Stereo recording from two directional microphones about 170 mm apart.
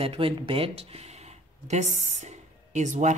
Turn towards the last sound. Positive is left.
turn(degrees=-45)  # may be behind; listen again after turning